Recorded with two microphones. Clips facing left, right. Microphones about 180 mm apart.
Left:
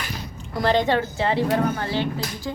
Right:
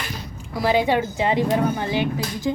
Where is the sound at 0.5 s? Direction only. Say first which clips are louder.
Right 1 dB; 10° right (ahead or behind).